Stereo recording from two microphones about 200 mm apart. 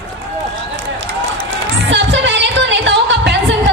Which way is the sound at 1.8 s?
65° right (ahead or behind).